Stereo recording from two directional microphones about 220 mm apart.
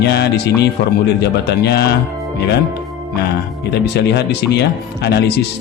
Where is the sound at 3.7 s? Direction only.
50° left (ahead or behind).